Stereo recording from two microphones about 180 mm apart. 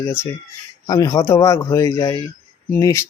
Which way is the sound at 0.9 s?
20° left (ahead or behind).